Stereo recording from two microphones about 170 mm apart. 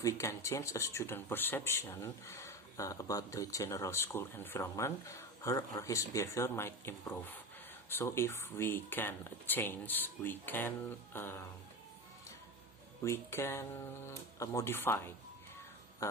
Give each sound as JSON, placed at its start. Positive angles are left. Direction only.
{"t": 0.0, "sound": "speech", "side_deg": 20}
{"t": 11.1, "sound": "a sound", "side_deg": 15}
{"t": 13.0, "sound": "speech", "side_deg": 15}